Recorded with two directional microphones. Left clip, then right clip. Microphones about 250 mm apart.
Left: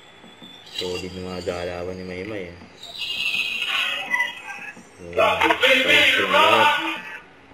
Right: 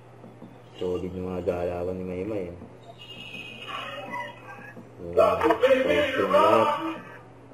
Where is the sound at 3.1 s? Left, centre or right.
Centre.